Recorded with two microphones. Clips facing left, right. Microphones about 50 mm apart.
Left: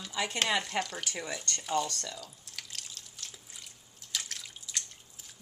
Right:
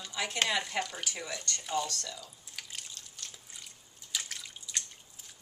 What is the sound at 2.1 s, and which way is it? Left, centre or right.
Drip, centre.